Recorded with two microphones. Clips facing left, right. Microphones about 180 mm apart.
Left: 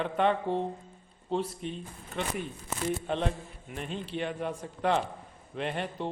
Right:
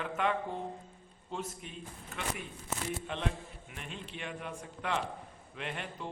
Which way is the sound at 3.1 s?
35° left (ahead or behind).